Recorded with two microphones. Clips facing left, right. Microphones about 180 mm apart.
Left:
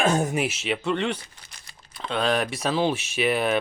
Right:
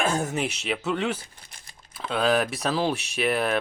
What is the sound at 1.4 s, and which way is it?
Typing, 55° right (ahead or behind).